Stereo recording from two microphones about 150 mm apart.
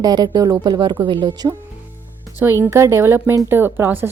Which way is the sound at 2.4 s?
15° right (ahead or behind).